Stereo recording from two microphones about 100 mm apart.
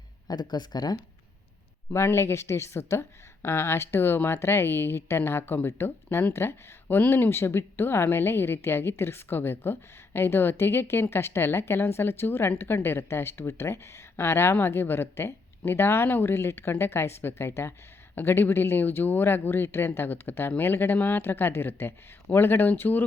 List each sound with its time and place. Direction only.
0.3 s speech: 45° left (ahead or behind)
1.9 s a woman's voice: 25° left (ahead or behind)